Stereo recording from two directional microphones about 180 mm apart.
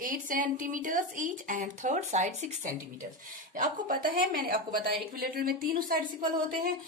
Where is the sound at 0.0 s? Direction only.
50° right (ahead or behind).